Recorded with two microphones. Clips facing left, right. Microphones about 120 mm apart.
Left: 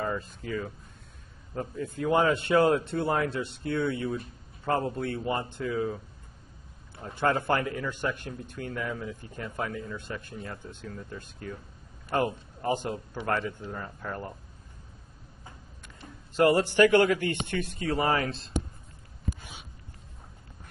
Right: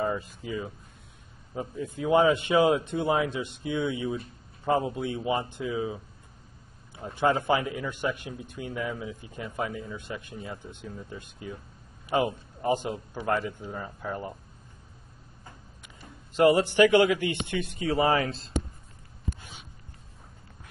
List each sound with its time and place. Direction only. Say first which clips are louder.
0.2 s a man's voice: even; 5° right (ahead or behind)
7.0 s a man's voice: right 2 dB; 10° right (ahead or behind)
16.3 s speech: right 2 dB; centre (ahead or behind)
16.7 s a man's voice: right 1 dB; 15° right (ahead or behind)